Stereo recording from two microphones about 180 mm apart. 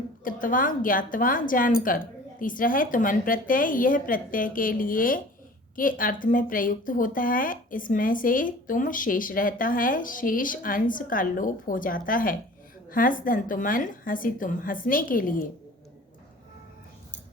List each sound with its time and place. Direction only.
0.3 s a woman's voice: 50° left (ahead or behind)